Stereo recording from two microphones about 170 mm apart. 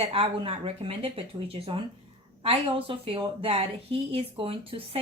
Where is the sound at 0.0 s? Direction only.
35° right (ahead or behind).